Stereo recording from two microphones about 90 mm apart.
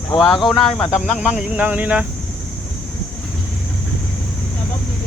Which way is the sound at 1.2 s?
15° right (ahead or behind).